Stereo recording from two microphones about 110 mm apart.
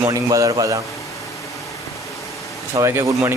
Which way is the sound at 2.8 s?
25° right (ahead or behind).